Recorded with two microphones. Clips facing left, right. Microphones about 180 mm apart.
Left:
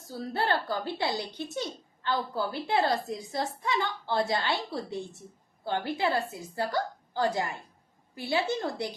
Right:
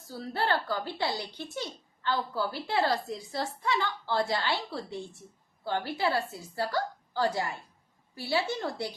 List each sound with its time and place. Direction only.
0.4 s a woman's voice: 20° left (ahead or behind)